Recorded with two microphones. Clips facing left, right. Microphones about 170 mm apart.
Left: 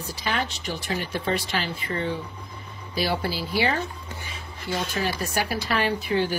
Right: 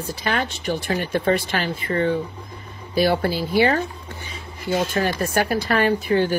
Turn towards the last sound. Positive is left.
turn(degrees=-50)  # may be behind; listen again after turning